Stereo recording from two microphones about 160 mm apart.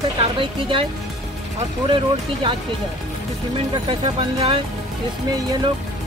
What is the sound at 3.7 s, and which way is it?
Speech, 30° right (ahead or behind).